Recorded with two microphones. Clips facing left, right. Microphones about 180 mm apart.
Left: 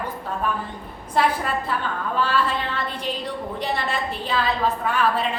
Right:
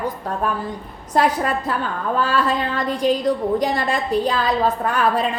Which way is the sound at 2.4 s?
40° right (ahead or behind).